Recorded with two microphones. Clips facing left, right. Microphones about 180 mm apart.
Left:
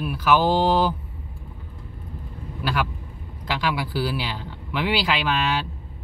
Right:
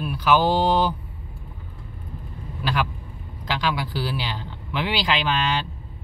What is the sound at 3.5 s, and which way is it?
Speech, 5° left (ahead or behind).